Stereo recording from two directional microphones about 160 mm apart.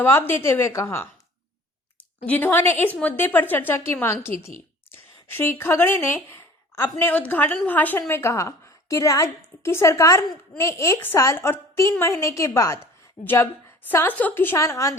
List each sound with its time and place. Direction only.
0.0 s a woman's voice: 15° left (ahead or behind)
2.2 s a woman's voice: 10° left (ahead or behind)